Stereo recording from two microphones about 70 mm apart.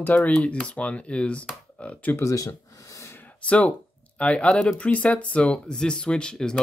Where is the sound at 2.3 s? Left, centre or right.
Left.